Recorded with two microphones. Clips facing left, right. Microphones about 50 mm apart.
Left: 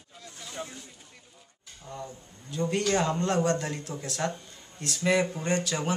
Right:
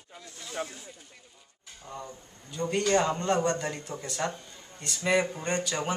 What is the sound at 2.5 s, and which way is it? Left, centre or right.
A man's voice, centre.